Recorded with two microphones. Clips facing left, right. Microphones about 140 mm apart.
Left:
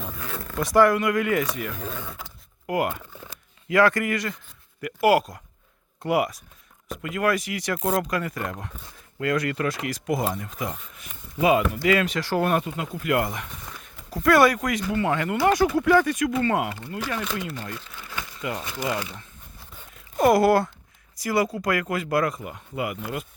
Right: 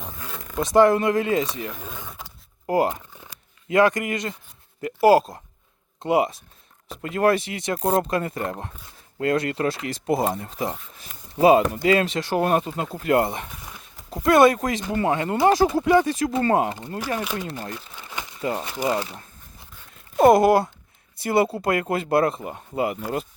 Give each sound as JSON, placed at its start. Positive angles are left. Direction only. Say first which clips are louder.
{"t": 0.0, "sound": "speech", "louder": "left 3 dB", "side_deg": -20}
{"t": 1.8, "sound": "speech", "louder": "left 3 dB", "side_deg": -10}
{"t": 2.6, "sound": "speech", "louder": "right 4 dB", "side_deg": -30}
{"t": 3.7, "sound": "speech", "louder": "right 1 dB", "side_deg": -20}
{"t": 17.5, "sound": "speech", "louder": "right 2 dB", "side_deg": -20}
{"t": 18.3, "sound": "speech", "louder": "right 5 dB", "side_deg": -30}
{"t": 20.1, "sound": "speech", "louder": "right 3 dB", "side_deg": -25}